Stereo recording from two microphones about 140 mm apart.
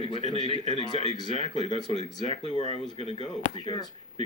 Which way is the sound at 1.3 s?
50° right (ahead or behind).